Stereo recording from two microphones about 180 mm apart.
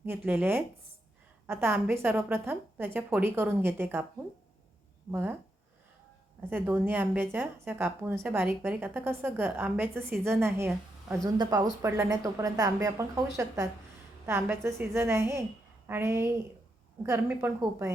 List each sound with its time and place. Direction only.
0.0 s speech: 10° right (ahead or behind)
5.1 s speech: 10° right (ahead or behind)
6.4 s speech: 10° right (ahead or behind)